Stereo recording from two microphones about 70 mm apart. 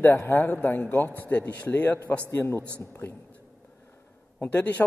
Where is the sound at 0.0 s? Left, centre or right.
Left.